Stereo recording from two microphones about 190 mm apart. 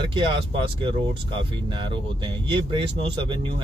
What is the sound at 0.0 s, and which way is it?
Speech, 25° right (ahead or behind).